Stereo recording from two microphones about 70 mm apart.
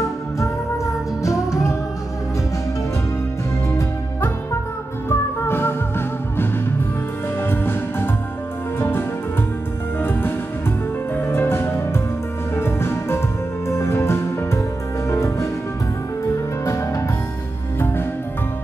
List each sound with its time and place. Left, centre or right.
0.4 s music: left
5.1 s music: left
16.6 s music: left
17.7 s music: left